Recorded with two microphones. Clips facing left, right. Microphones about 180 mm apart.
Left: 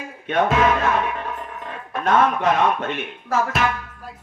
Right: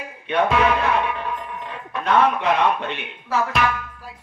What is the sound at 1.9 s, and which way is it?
Speech, 45° left (ahead or behind).